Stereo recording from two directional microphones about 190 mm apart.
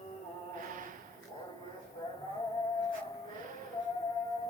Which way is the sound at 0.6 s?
45° right (ahead or behind).